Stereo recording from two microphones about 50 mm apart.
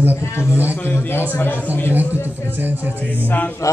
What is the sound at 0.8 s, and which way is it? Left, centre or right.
Speech, left.